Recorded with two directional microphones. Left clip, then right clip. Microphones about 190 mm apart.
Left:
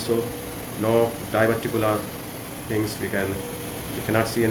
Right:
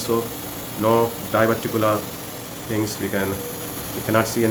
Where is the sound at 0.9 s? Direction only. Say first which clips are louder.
Left 2 dB; 40° right (ahead or behind).